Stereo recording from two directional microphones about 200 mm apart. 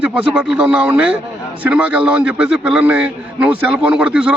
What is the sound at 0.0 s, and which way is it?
A man's voice, 5° right (ahead or behind).